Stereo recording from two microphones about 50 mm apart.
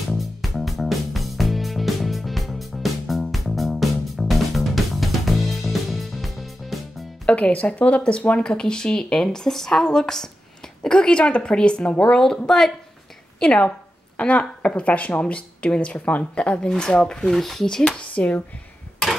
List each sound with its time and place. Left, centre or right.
0.1 s music: centre
7.2 s a woman's voice: left
13.4 s a woman's voice: left